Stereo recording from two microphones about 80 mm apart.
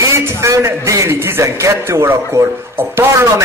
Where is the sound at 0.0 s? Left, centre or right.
Right.